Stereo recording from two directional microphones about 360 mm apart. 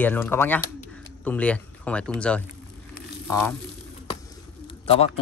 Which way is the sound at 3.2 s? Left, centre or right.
Centre.